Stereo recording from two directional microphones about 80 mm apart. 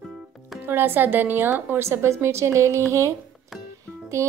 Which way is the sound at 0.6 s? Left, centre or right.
Right.